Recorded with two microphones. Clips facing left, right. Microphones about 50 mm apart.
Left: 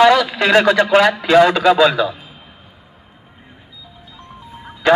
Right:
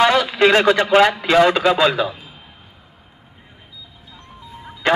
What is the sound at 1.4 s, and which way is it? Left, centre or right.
Speech, right.